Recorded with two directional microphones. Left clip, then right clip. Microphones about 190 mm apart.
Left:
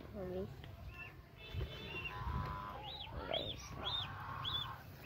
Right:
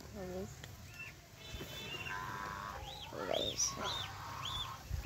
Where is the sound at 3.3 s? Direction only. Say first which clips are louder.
Right 6 dB; 70° right (ahead or behind).